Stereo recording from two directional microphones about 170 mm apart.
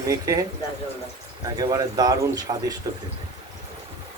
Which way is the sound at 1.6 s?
25° right (ahead or behind).